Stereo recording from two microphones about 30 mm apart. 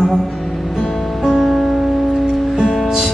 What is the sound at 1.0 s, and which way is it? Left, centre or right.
Music, centre.